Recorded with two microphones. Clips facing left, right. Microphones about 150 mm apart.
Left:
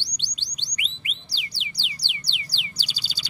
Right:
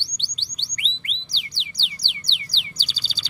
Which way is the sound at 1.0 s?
10° left (ahead or behind).